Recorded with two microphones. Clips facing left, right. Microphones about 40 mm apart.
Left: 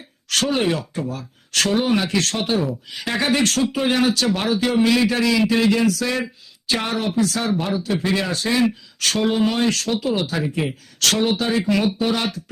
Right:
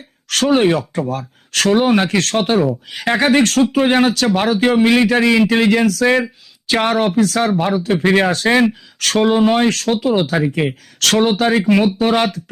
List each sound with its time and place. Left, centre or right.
0.3 s speech: right
11.6 s speech: right
11.9 s speech: right